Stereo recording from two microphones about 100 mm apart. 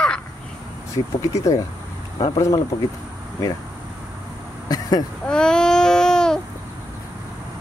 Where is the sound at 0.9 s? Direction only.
30° left (ahead or behind).